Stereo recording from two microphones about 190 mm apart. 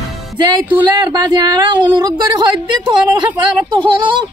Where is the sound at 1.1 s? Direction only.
20° right (ahead or behind).